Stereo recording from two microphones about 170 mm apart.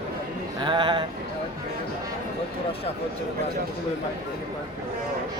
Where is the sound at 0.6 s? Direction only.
30° right (ahead or behind).